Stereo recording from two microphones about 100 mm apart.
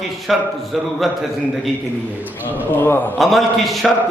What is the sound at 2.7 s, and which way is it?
Speech, 20° left (ahead or behind).